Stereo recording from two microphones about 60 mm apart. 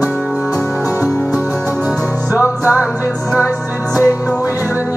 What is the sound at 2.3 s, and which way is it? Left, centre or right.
Music, right.